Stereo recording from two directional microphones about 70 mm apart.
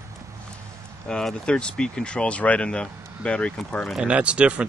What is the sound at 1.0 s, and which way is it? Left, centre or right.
Speech, centre.